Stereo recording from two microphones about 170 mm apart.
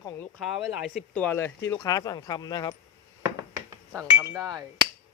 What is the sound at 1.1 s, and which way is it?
Speech, 10° left (ahead or behind).